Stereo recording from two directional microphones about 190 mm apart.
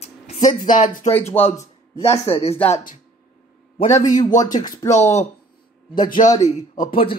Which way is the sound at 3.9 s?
20° left (ahead or behind).